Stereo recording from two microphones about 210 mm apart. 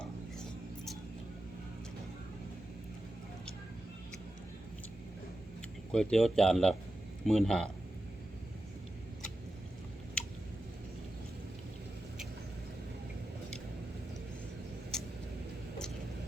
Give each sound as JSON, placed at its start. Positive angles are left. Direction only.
{"t": 5.9, "sound": "a man's voice", "side_deg": 5}
{"t": 10.2, "sound": "clicking", "side_deg": 5}